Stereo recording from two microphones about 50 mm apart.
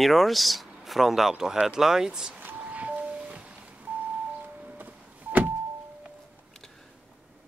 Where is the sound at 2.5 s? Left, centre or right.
Right.